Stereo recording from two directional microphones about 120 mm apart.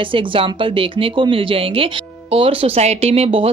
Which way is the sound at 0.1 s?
45° right (ahead or behind).